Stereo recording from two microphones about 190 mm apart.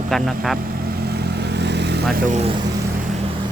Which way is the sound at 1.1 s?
60° right (ahead or behind).